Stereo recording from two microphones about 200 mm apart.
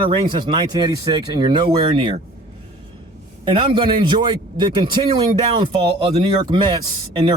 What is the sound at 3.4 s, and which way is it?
A man's voice, 25° right (ahead or behind).